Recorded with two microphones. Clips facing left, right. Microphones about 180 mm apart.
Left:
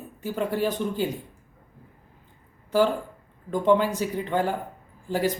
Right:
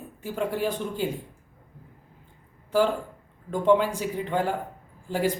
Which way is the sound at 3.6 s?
5° left (ahead or behind).